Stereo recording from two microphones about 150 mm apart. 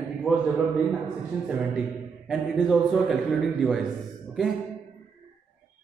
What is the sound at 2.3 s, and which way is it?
Speech, centre (ahead or behind).